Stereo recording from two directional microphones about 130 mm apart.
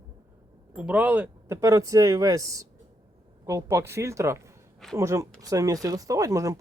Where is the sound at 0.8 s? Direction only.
10° right (ahead or behind).